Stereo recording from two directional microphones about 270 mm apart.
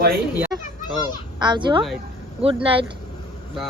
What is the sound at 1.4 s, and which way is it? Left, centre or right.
A woman's voice, centre.